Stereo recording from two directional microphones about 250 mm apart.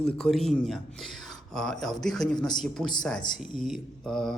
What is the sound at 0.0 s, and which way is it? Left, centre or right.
Speech, centre.